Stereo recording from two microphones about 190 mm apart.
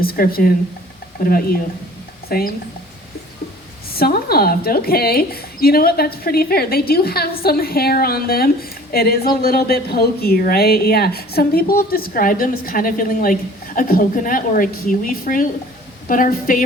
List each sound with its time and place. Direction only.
0.0 s speech: 50° left (ahead or behind)
3.9 s speech: 55° left (ahead or behind)